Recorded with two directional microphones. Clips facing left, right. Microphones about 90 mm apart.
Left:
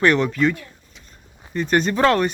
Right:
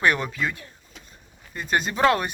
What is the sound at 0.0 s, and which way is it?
Speech, 10° right (ahead or behind).